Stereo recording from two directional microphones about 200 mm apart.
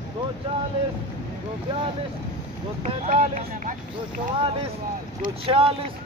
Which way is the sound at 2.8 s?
40° right (ahead or behind).